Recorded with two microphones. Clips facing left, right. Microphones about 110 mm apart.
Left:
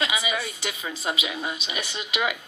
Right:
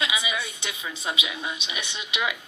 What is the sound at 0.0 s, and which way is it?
A woman's voice, 40° left (ahead or behind).